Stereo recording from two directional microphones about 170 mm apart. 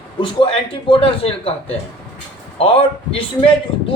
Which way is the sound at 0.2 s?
30° left (ahead or behind).